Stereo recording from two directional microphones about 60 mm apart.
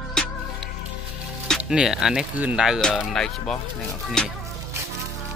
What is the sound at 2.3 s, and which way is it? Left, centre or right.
Speech, right.